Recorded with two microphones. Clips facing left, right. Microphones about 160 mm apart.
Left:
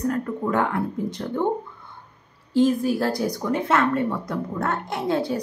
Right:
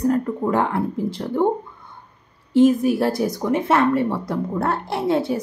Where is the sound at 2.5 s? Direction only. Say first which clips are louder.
Right 4 dB; 20° right (ahead or behind).